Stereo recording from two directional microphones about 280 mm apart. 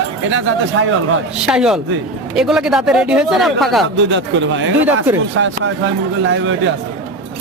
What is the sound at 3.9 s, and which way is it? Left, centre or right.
A man's voice, right.